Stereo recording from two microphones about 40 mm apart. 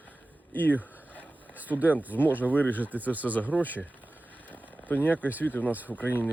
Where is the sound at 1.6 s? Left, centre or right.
Right.